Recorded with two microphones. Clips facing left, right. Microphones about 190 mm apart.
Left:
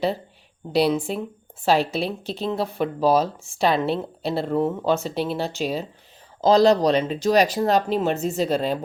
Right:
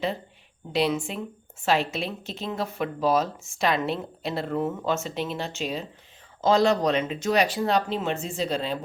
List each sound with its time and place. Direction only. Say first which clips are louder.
0.7 s speech: left 5 dB; 35° left (ahead or behind)